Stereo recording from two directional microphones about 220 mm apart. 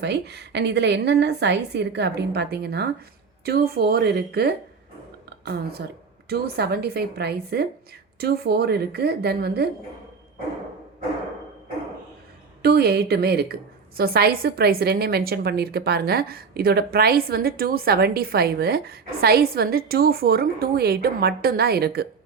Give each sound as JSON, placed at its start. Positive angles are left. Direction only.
{"t": 0.0, "sound": "a woman's voice", "side_deg": -50}
{"t": 5.8, "sound": "a woman's voice", "side_deg": -50}
{"t": 12.6, "sound": "a woman's voice", "side_deg": -45}